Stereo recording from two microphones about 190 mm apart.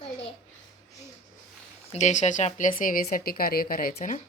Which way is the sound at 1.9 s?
40° left (ahead or behind).